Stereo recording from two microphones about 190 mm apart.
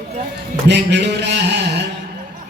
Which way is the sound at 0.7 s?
65° right (ahead or behind).